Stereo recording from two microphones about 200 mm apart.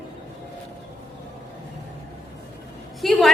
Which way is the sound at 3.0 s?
Centre (ahead or behind).